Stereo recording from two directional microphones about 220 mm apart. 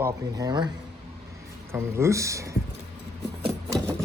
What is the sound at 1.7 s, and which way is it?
Speech, 10° right (ahead or behind).